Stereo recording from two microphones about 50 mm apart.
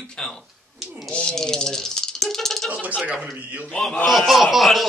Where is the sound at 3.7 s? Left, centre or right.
Centre.